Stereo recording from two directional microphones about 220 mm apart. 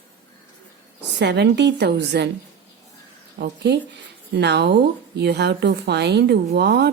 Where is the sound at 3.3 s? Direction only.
50° right (ahead or behind).